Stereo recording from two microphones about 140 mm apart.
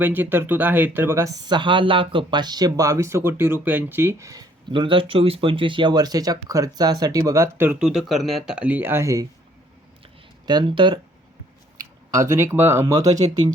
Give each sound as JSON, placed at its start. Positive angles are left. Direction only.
{"t": 0.0, "sound": "speech", "side_deg": -15}
{"t": 4.7, "sound": "speech", "side_deg": -35}
{"t": 10.4, "sound": "speech", "side_deg": -35}
{"t": 11.8, "sound": "speech", "side_deg": -20}